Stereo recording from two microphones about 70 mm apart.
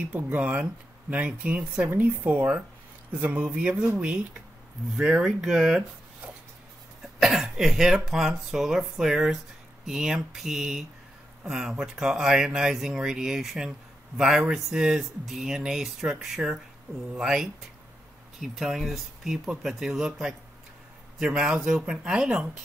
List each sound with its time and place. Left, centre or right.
0.1 s speech: right
5.2 s speech: centre
7.2 s speech: centre